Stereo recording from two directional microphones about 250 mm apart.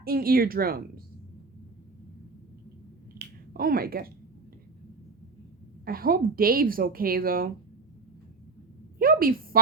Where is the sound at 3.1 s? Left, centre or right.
Right.